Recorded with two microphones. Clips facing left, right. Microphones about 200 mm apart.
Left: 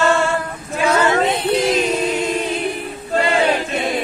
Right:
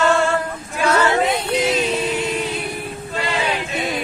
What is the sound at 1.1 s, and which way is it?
Female singing, 10° right (ahead or behind).